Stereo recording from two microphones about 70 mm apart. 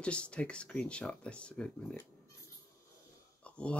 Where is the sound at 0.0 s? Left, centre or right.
Centre.